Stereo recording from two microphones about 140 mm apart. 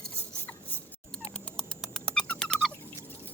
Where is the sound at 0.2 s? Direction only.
10° left (ahead or behind).